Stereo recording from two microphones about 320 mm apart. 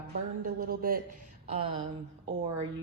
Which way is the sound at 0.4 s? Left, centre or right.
Right.